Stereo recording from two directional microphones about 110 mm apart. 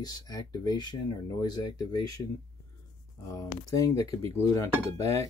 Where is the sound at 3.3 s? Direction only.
30° left (ahead or behind).